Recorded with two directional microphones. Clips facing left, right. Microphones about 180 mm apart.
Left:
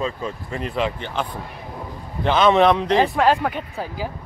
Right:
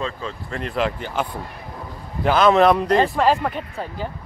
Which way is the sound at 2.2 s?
Centre (ahead or behind).